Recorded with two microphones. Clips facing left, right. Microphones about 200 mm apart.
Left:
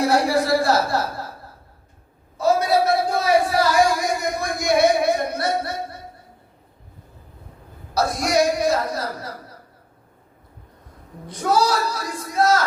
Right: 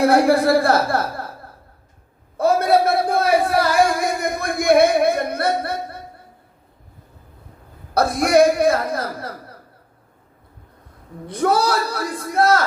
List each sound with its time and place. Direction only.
0.0 s speech: 55° right (ahead or behind)
2.4 s a sound: 55° right (ahead or behind)
7.9 s speech: 55° right (ahead or behind)
11.3 s speech: 60° right (ahead or behind)